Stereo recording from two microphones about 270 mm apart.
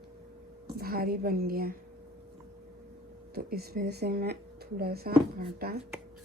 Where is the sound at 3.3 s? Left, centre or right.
Right.